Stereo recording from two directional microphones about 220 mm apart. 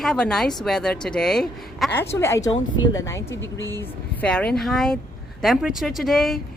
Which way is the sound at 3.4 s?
55° left (ahead or behind).